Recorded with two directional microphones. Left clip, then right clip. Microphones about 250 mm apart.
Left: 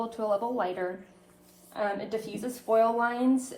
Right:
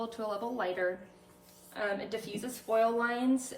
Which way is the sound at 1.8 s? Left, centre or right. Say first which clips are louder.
Left 4 dB; centre.